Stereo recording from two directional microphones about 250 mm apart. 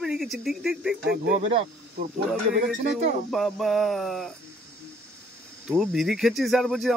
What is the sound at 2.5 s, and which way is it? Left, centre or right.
Speech, right.